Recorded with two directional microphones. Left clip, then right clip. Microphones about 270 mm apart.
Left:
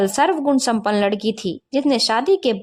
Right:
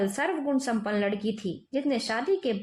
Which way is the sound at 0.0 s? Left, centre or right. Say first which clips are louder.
Left 11 dB; left.